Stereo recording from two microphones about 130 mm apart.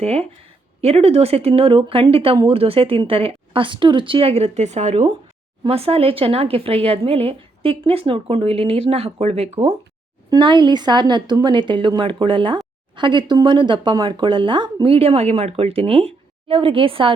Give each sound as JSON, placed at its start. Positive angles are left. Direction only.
{"t": 0.0, "sound": "speech", "side_deg": -50}
{"t": 5.6, "sound": "speech", "side_deg": -50}
{"t": 10.2, "sound": "speech", "side_deg": -35}